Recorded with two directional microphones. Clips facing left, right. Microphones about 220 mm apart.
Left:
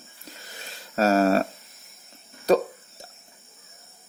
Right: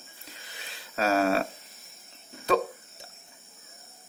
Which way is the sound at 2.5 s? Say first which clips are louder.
Left 5 dB; 40° left (ahead or behind).